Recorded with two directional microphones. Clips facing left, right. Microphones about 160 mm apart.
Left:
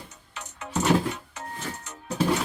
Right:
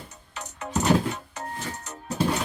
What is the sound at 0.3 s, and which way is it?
Music, 40° right (ahead or behind).